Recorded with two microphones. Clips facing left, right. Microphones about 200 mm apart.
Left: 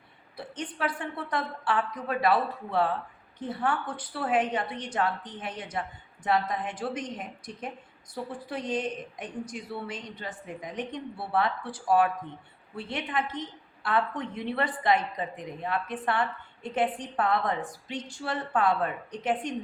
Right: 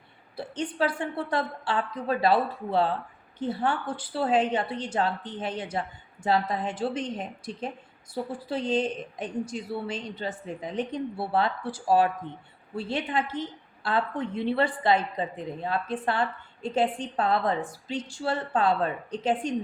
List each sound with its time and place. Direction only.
0.3 s a woman's voice: 30° right (ahead or behind)